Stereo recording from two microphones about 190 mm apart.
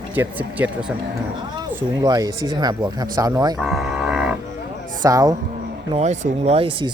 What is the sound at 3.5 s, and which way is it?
Cattle, centre (ahead or behind).